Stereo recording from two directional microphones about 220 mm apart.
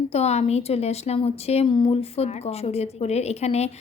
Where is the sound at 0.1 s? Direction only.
30° left (ahead or behind).